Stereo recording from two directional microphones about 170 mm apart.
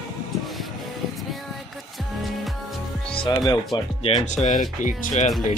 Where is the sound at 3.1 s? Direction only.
30° left (ahead or behind).